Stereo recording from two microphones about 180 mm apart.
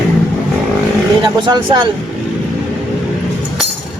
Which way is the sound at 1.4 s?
25° right (ahead or behind).